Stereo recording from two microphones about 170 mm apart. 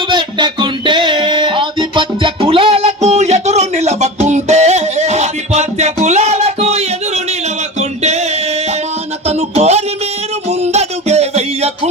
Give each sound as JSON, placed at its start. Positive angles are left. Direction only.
{"t": 0.1, "sound": "music", "side_deg": -25}